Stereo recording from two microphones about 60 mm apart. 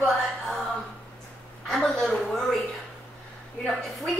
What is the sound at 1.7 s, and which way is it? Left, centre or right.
Speech, centre.